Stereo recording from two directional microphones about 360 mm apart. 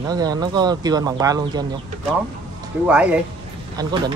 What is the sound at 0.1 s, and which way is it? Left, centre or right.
Speech, centre.